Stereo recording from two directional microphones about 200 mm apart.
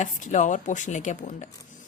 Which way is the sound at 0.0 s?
35° left (ahead or behind).